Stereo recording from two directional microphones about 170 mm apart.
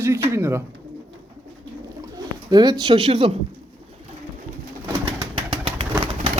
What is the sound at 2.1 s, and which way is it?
Speech, 25° right (ahead or behind).